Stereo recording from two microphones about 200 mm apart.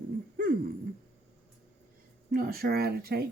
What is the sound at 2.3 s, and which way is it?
Speech, 50° right (ahead or behind).